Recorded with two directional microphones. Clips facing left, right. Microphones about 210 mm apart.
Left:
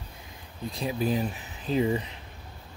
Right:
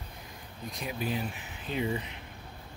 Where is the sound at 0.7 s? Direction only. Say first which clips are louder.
Left 6 dB; 30° left (ahead or behind).